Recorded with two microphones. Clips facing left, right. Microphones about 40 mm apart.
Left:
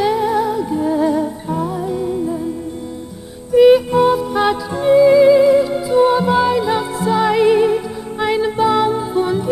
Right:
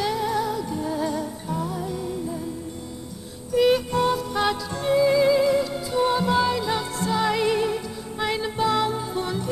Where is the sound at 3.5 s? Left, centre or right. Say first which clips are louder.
Left 10 dB; centre.